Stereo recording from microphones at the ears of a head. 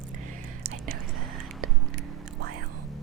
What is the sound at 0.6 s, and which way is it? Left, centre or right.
Whispering, right.